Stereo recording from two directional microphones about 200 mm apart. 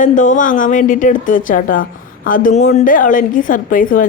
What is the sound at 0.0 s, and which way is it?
A woman's voice, 40° left (ahead or behind).